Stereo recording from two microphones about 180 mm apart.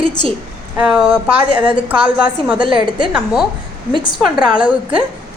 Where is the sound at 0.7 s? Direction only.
5° right (ahead or behind).